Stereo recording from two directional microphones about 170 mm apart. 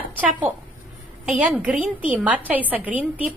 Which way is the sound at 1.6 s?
10° right (ahead or behind).